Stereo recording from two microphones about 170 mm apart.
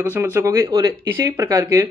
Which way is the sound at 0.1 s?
15° right (ahead or behind).